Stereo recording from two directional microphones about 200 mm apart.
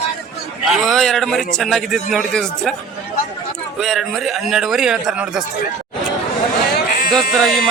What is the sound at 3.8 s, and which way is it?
Speech, centre (ahead or behind).